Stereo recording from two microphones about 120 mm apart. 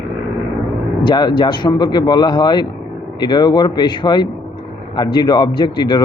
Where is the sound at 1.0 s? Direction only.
35° left (ahead or behind).